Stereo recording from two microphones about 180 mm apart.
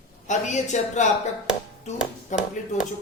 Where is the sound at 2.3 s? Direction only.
40° left (ahead or behind).